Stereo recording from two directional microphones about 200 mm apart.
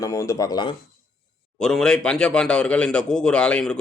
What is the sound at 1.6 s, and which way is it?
A man's voice, 5° left (ahead or behind).